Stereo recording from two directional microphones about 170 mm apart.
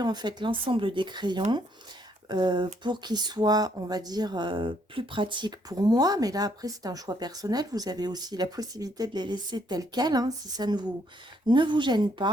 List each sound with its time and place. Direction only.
0.0 s speech: 25° right (ahead or behind)